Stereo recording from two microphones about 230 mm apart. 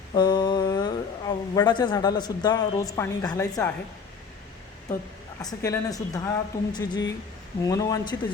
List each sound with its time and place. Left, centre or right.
0.1 s speech: centre
5.4 s speech: centre